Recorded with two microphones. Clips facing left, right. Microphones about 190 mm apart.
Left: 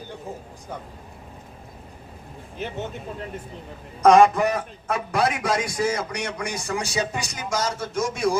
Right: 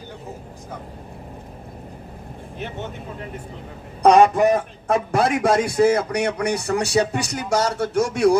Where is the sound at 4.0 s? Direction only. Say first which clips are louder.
Right 1 dB; 40° right (ahead or behind).